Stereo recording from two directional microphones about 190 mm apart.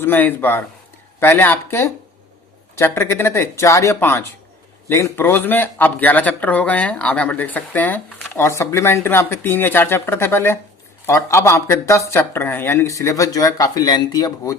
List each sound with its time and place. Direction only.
0.0 s speech: 10° left (ahead or behind)